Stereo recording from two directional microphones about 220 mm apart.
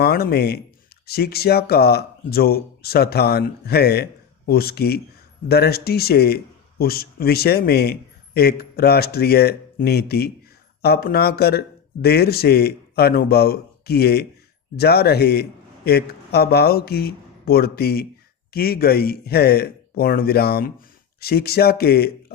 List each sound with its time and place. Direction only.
0.0 s speech: 45° left (ahead or behind)